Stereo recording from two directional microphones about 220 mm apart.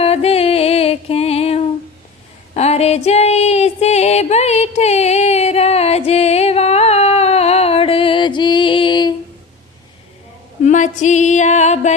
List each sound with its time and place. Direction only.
0.0 s music: 25° left (ahead or behind)
2.6 s female singing: 30° left (ahead or behind)
10.6 s a sound: 35° left (ahead or behind)